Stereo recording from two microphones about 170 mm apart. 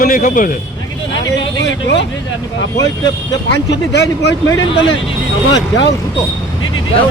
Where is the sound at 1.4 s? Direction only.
90° left.